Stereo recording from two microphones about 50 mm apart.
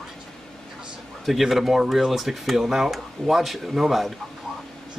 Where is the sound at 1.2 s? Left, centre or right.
Centre.